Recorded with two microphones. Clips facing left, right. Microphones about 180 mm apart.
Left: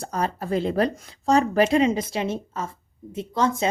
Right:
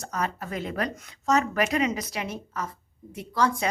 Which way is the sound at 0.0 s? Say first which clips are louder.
Left 4 dB; 30° left (ahead or behind).